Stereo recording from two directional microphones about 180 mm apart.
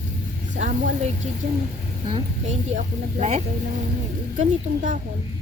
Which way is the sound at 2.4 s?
40° right (ahead or behind).